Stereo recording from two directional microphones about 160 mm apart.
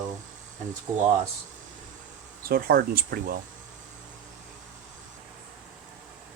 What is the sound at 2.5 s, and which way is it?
Speech, 70° right (ahead or behind).